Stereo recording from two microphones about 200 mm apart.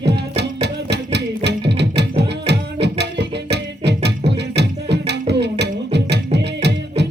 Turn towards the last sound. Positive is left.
turn(degrees=-55)  # may be behind; listen again after turning